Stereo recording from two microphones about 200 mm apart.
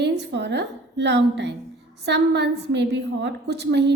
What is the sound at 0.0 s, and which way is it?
A woman's voice, 60° right (ahead or behind).